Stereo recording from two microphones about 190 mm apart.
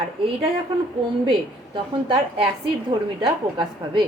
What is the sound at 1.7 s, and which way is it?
A woman's voice, 25° right (ahead or behind).